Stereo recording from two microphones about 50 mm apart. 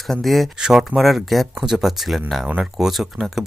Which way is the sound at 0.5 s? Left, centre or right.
Centre.